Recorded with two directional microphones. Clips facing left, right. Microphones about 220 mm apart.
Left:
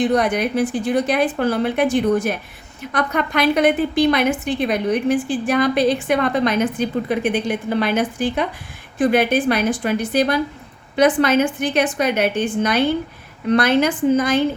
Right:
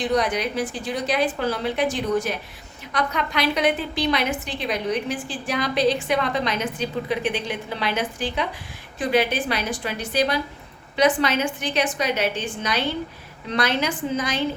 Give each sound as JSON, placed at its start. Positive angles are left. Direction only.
{"t": 0.0, "sound": "a woman's voice", "side_deg": 55}